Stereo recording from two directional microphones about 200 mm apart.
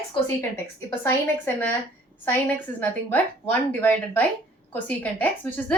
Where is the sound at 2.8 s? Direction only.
10° left (ahead or behind).